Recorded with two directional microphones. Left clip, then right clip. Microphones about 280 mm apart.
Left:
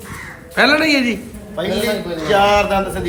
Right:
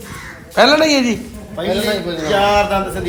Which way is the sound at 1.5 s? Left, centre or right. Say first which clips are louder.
Right 1 dB; centre.